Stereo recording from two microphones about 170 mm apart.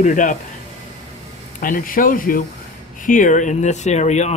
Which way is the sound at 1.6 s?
55° left (ahead or behind).